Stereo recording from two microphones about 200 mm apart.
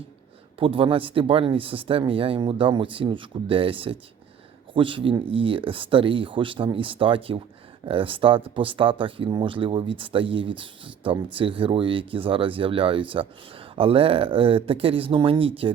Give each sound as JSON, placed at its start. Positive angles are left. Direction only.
{"t": 0.6, "sound": "speech", "side_deg": -25}